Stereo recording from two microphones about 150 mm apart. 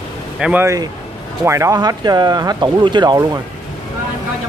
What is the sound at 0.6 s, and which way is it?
Speech, 20° right (ahead or behind).